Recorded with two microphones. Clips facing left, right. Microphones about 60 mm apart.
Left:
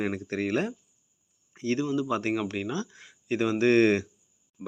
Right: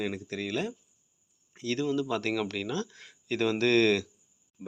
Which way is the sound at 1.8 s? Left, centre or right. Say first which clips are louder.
Left 2 dB; centre.